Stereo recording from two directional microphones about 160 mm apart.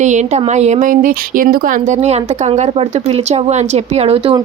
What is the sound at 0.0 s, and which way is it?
Speech, 45° right (ahead or behind).